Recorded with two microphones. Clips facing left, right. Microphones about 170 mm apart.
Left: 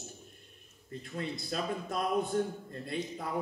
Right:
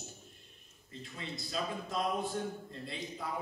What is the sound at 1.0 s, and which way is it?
Speech, 55° left (ahead or behind).